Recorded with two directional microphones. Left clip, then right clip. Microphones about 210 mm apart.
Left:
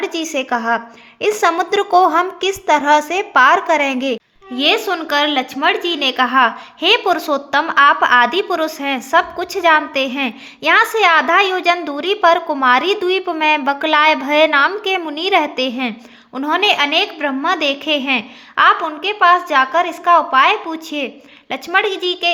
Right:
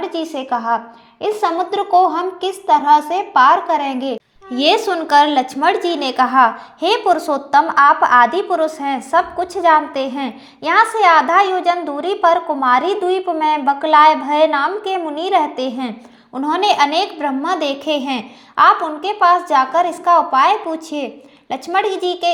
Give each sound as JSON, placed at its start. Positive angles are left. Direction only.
{"t": 0.0, "sound": "a woman's voice", "side_deg": 30}
{"t": 4.5, "sound": "a woman's voice", "side_deg": 0}